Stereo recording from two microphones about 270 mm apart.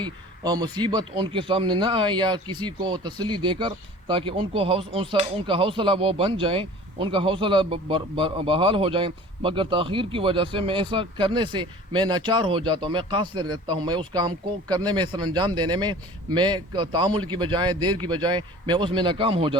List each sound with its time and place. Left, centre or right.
0.0 s a man's voice: centre